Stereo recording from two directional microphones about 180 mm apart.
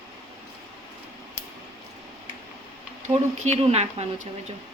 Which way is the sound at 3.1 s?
35° right (ahead or behind).